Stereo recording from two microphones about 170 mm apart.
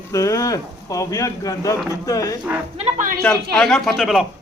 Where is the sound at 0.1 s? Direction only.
20° left (ahead or behind).